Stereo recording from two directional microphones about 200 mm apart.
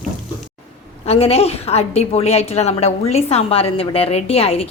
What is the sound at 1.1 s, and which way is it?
A woman's voice, 30° left (ahead or behind).